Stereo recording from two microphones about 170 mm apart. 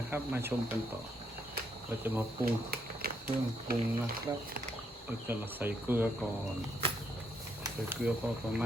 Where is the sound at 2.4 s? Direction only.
60° right (ahead or behind).